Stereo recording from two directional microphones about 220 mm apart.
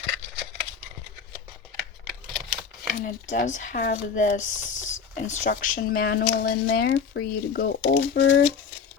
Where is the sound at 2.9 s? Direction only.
40° left (ahead or behind).